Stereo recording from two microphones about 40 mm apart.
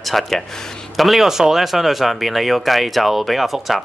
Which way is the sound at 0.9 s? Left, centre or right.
Centre.